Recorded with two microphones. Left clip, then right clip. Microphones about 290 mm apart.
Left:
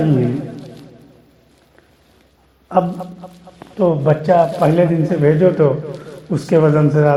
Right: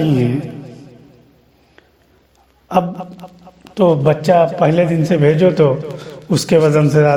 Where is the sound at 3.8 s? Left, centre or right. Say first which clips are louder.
Right 2 dB; right.